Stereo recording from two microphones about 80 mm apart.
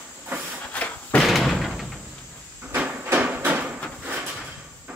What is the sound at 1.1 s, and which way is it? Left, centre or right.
Slam, centre.